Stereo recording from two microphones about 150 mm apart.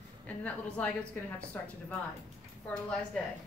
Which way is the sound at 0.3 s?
10° left (ahead or behind).